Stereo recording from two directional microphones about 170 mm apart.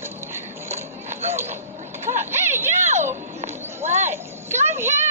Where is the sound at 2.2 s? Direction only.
15° right (ahead or behind).